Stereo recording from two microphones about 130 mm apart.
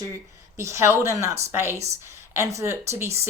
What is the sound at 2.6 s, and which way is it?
Speech, 20° right (ahead or behind).